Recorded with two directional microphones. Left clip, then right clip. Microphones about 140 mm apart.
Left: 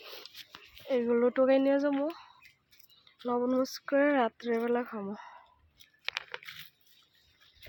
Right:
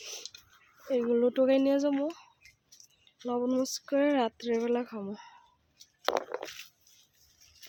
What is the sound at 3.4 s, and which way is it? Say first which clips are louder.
Speech: even; 5° right (ahead or behind).